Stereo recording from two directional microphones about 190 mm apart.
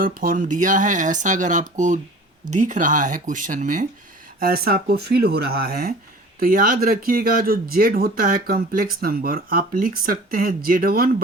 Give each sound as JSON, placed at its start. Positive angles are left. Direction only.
{"t": 0.0, "sound": "speech", "side_deg": -50}
{"t": 4.4, "sound": "speech", "side_deg": -55}